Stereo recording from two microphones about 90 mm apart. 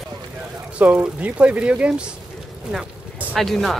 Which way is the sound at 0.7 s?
15° right (ahead or behind).